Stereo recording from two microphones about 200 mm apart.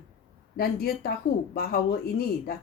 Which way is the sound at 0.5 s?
50° left (ahead or behind).